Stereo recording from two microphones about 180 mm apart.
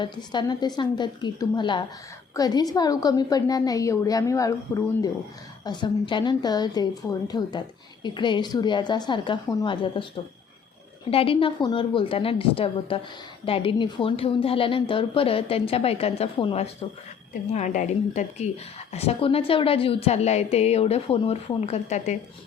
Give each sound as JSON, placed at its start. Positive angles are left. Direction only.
{"t": 0.0, "sound": "a woman's voice", "side_deg": 25}
{"t": 11.1, "sound": "a woman's voice", "side_deg": 30}